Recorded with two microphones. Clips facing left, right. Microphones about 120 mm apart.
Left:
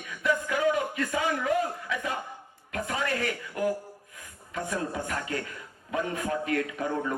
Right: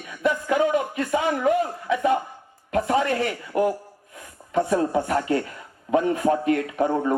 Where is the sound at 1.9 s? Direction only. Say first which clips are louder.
Right 11 dB; 20° right (ahead or behind).